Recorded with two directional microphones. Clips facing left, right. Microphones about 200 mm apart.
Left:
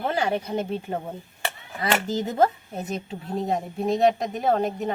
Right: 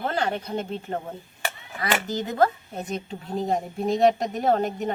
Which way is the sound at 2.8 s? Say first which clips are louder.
Even; 5° left (ahead or behind).